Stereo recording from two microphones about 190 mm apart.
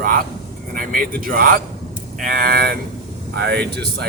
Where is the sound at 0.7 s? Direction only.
50° right (ahead or behind).